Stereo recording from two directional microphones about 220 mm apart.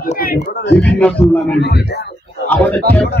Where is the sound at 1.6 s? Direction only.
50° left (ahead or behind).